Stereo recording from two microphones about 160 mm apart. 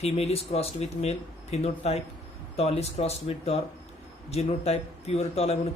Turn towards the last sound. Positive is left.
turn(degrees=40)  # may be behind; listen again after turning